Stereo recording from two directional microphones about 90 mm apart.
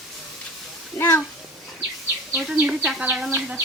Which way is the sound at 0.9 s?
25° left (ahead or behind).